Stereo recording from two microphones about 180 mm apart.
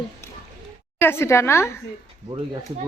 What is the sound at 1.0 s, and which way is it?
Speech, 15° left (ahead or behind).